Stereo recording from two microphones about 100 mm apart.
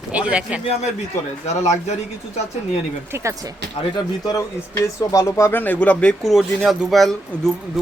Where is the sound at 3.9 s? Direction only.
40° left (ahead or behind).